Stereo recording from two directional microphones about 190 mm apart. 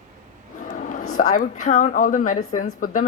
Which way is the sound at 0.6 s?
45° left (ahead or behind).